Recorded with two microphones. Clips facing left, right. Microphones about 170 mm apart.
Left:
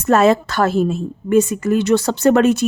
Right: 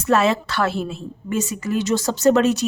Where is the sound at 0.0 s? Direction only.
45° left (ahead or behind).